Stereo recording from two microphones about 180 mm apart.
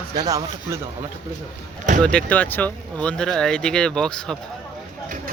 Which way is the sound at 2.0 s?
5° left (ahead or behind).